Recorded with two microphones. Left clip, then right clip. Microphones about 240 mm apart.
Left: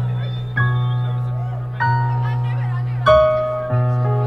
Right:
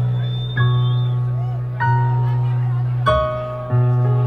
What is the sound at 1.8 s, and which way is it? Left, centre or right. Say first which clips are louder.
Music: left 1 dB; centre.